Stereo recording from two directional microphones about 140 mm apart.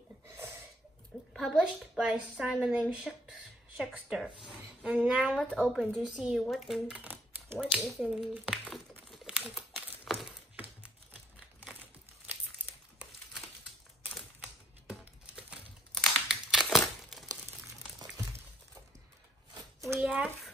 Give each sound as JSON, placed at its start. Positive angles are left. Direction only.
{"t": 1.3, "sound": "a woman's voice", "side_deg": 0}
{"t": 9.1, "sound": "crumpling", "side_deg": -5}
{"t": 10.0, "sound": "a sound", "side_deg": 0}
{"t": 10.5, "sound": "computer keyboard", "side_deg": -10}
{"t": 15.9, "sound": "crumpling", "side_deg": 0}
{"t": 20.0, "sound": "a sound", "side_deg": -10}